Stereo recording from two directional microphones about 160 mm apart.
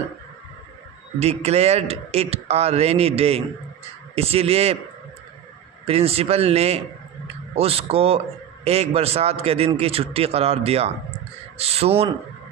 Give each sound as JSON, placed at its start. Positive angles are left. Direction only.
{"t": 1.2, "sound": "a man's voice", "side_deg": -40}
{"t": 5.8, "sound": "a man's voice", "side_deg": -40}